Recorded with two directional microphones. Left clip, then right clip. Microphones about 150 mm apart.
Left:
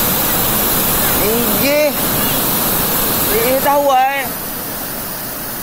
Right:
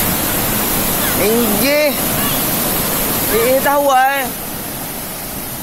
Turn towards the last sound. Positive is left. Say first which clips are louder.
# right 1 dB
turn(degrees=-40)  # may be behind; listen again after turning